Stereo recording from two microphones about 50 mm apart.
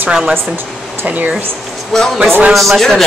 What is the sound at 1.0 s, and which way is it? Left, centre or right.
Speech, right.